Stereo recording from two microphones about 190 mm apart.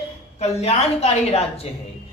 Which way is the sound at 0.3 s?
35° left (ahead or behind).